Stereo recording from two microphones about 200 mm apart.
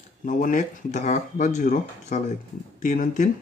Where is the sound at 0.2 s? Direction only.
40° left (ahead or behind).